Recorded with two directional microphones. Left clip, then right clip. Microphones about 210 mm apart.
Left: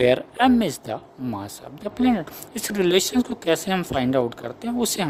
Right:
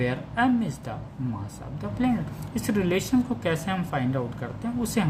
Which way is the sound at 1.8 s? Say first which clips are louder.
Left 5 dB; 55° left (ahead or behind).